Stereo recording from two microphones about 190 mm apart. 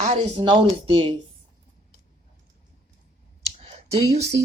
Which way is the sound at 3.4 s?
30° right (ahead or behind).